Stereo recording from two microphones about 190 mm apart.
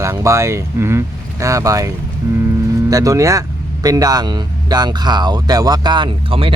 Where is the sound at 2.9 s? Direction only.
15° right (ahead or behind).